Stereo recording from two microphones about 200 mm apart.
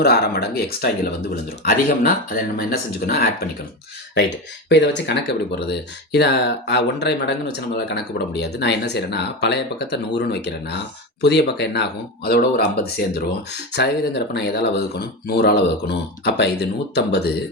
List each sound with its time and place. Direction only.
0.0 s speech: 50° left (ahead or behind)
4.7 s speech: 60° left (ahead or behind)